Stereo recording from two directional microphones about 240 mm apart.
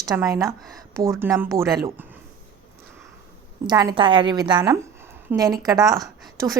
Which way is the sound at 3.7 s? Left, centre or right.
Centre.